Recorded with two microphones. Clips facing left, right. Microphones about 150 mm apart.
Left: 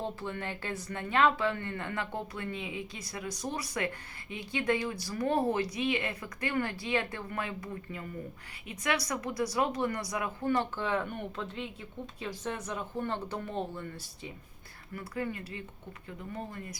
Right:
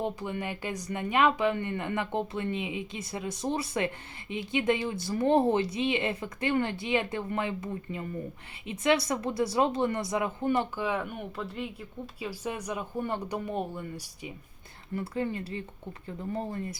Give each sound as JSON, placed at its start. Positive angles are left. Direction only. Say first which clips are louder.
{"t": 0.0, "sound": "speech", "louder": "right 4 dB", "side_deg": -15}
{"t": 10.5, "sound": "speech", "louder": "even", "side_deg": -10}
{"t": 14.9, "sound": "speech", "louder": "right 5 dB", "side_deg": -25}